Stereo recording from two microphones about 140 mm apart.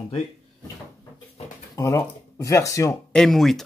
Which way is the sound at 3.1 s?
5° left (ahead or behind).